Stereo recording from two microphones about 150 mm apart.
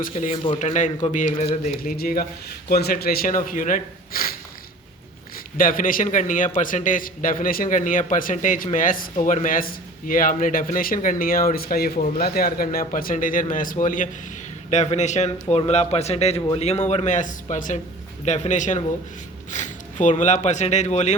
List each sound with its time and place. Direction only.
0.1 s a man's voice: 50° left (ahead or behind)
1.8 s a man's voice: 75° left (ahead or behind)
2.6 s speech: 90° left
5.5 s a man's voice: 65° left (ahead or behind)
14.7 s a man's voice: 50° left (ahead or behind)